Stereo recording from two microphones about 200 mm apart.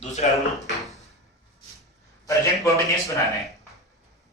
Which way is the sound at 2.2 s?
15° left (ahead or behind).